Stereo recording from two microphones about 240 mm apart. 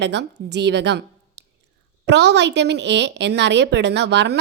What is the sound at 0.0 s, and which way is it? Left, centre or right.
A woman's voice, right.